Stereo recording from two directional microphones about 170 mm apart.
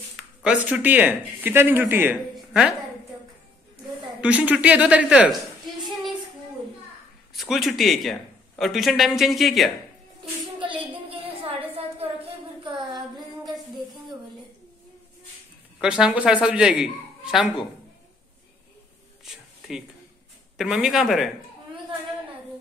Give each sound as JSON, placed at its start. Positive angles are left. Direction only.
{"t": 0.1, "sound": "speech", "side_deg": -5}
{"t": 2.3, "sound": "a sound", "side_deg": -5}
{"t": 4.2, "sound": "speech", "side_deg": -10}
{"t": 7.3, "sound": "a man's voice", "side_deg": 0}
{"t": 10.6, "sound": "a sound", "side_deg": -30}
{"t": 15.8, "sound": "a man's voice", "side_deg": -5}
{"t": 19.3, "sound": "speech", "side_deg": 0}
{"t": 20.5, "sound": "a man's voice", "side_deg": -5}